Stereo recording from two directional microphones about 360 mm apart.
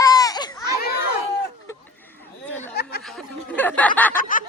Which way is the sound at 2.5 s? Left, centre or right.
Centre.